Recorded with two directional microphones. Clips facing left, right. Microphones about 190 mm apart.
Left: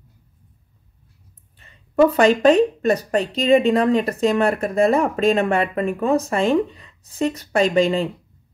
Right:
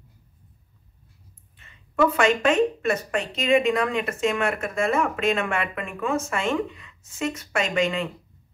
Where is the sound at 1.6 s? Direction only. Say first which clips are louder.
Left 6 dB; 35° left (ahead or behind).